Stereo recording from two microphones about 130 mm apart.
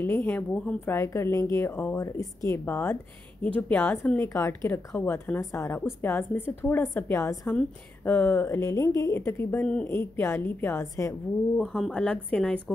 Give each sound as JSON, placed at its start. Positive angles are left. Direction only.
{"t": 0.0, "sound": "a woman's voice", "side_deg": 15}
{"t": 0.9, "sound": "a woman's voice", "side_deg": 20}
{"t": 5.4, "sound": "a woman's voice", "side_deg": 25}
{"t": 11.5, "sound": "speech", "side_deg": 0}